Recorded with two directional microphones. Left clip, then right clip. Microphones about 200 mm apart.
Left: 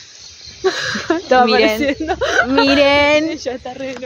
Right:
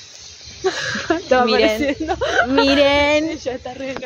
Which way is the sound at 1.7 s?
50° left (ahead or behind).